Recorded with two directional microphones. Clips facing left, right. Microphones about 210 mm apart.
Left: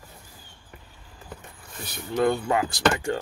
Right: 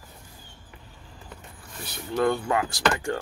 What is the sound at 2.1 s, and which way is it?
Speech, 25° left (ahead or behind).